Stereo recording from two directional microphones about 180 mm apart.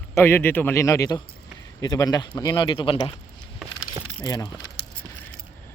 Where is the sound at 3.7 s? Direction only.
20° left (ahead or behind).